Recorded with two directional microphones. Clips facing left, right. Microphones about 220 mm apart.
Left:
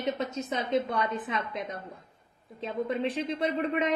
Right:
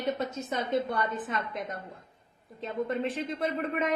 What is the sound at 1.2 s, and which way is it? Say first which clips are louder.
A woman's voice: left 1 dB; centre (ahead or behind).